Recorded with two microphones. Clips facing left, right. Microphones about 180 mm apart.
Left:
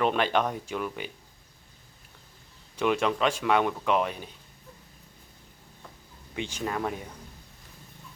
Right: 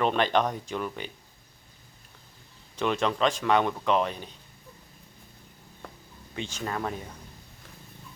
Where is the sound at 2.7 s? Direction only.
10° left (ahead or behind).